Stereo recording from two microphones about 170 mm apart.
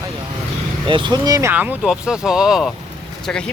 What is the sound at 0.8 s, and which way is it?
Speech, 30° right (ahead or behind).